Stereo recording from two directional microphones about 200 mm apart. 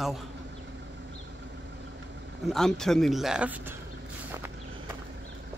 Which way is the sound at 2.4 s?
Centre (ahead or behind).